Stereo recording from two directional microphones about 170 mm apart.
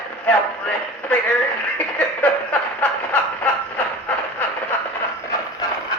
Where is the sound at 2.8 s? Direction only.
10° left (ahead or behind).